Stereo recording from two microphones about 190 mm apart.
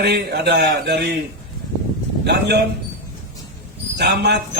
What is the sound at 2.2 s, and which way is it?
Speech, 60° right (ahead or behind).